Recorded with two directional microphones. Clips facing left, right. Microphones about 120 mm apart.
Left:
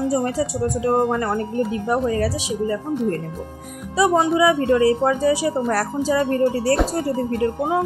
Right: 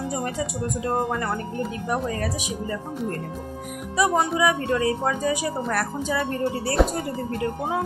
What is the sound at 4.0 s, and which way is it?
A woman's voice, 20° left (ahead or behind).